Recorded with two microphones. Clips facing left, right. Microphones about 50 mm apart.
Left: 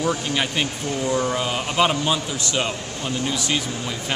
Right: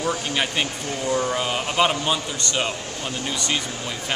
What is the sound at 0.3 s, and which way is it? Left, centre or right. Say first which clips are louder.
Speech: left 1 dB; centre.